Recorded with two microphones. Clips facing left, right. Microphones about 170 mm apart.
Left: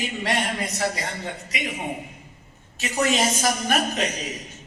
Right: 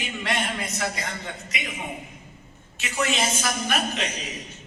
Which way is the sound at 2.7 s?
40° left (ahead or behind).